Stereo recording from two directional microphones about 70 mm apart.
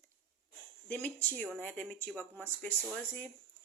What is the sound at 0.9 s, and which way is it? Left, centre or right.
A woman's voice, left.